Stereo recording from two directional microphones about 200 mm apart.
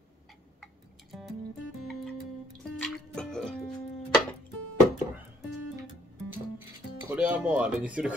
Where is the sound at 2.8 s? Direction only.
5° left (ahead or behind).